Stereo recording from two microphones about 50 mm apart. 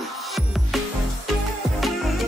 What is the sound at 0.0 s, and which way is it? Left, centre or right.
Music, centre.